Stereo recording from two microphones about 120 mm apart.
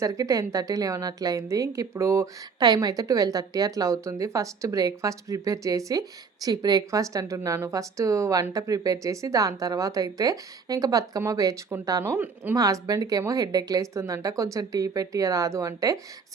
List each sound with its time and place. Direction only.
0.0 s a woman's voice: 30° right (ahead or behind)
12.5 s a woman's voice: 30° right (ahead or behind)